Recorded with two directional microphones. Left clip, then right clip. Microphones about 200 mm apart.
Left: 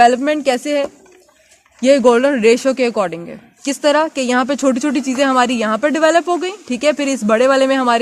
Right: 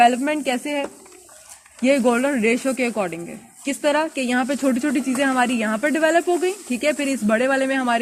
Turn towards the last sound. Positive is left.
turn(degrees=50)  # may be behind; listen again after turning